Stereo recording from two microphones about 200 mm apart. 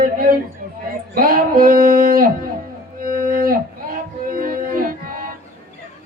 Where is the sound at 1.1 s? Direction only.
45° right (ahead or behind).